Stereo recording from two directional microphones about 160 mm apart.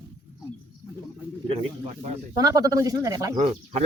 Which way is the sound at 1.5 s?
40° right (ahead or behind).